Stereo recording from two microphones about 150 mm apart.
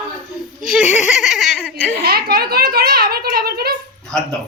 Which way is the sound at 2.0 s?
90° right.